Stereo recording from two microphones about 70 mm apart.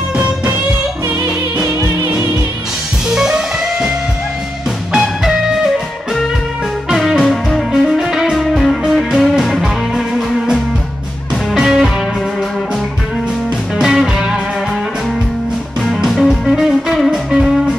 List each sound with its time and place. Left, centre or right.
3.2 s music: centre
5.0 s music: centre
7.0 s music: centre
13.7 s music: centre
15.9 s music: centre